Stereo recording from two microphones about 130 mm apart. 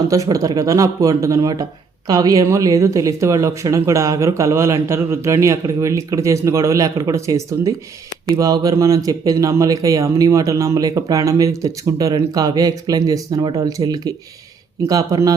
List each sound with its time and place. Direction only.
0.1 s speech: 25° right (ahead or behind)